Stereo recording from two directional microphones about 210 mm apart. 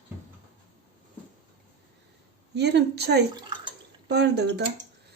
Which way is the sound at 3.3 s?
20° right (ahead or behind).